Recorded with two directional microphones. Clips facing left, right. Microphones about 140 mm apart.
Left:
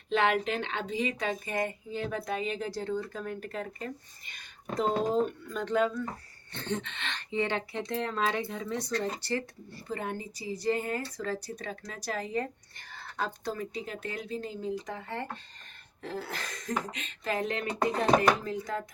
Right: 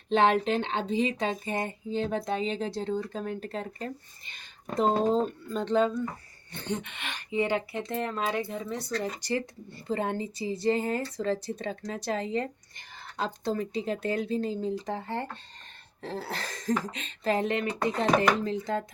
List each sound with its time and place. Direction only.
0.1 s speech: 30° right (ahead or behind)
6.5 s speech: 15° right (ahead or behind)
9.9 s speech: 30° right (ahead or behind)